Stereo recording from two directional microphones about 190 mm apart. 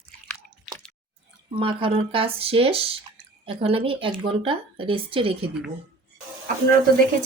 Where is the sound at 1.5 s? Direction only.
25° right (ahead or behind).